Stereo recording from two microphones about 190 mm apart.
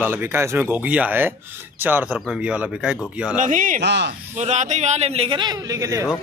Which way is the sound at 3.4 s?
45° right (ahead or behind).